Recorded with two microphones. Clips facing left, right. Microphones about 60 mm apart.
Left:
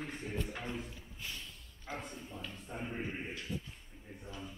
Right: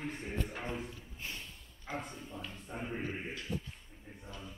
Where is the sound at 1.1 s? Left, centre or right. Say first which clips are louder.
Even; right.